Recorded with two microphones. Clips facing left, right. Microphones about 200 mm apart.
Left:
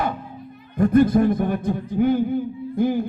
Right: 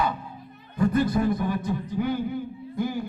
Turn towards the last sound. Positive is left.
turn(degrees=55)  # may be behind; listen again after turning